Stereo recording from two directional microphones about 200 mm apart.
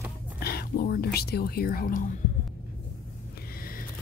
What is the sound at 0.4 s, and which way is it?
Speech, 50° left (ahead or behind).